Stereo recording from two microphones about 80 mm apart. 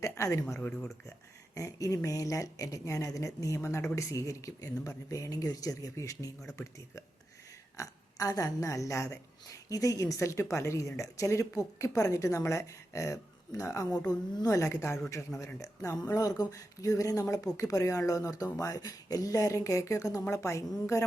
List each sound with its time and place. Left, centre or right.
1.5 s a woman's voice: left
14.6 s a woman's voice: left